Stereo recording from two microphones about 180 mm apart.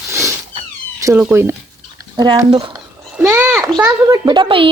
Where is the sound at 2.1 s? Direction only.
20° right (ahead or behind).